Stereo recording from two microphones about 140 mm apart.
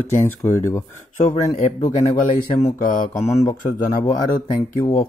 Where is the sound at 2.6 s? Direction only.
70° left (ahead or behind).